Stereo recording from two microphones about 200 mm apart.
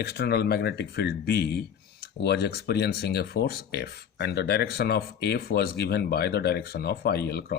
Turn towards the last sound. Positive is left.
turn(degrees=55)  # may be behind; listen again after turning